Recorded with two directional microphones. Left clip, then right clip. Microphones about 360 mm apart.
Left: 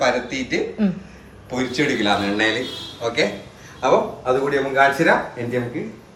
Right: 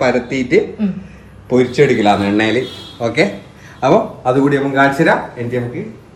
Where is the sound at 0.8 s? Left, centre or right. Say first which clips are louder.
Right 2 dB; left.